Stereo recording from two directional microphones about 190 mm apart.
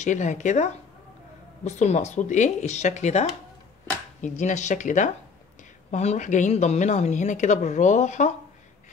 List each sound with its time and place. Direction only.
0.0 s speech: 40° left (ahead or behind)